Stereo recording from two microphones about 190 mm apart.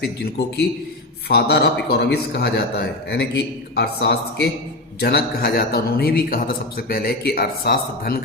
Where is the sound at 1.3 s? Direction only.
60° left (ahead or behind).